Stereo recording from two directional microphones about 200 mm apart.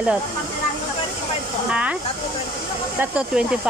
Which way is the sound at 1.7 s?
5° right (ahead or behind).